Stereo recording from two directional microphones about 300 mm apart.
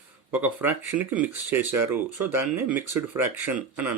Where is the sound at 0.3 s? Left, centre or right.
Centre.